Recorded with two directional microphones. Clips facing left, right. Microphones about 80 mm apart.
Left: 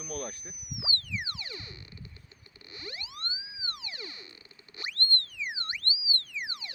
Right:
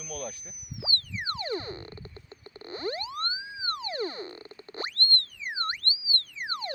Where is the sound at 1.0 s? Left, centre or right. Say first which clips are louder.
Right 5 dB; right.